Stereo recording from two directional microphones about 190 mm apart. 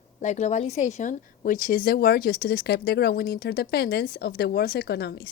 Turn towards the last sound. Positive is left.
turn(degrees=60)  # may be behind; listen again after turning